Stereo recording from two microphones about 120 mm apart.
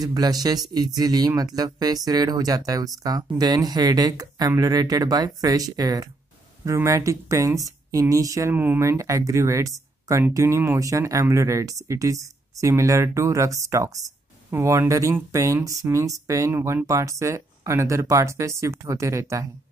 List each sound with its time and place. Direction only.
0.0 s speech: 30° right (ahead or behind)